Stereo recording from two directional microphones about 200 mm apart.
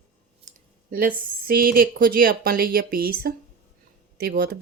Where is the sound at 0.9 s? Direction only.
45° right (ahead or behind).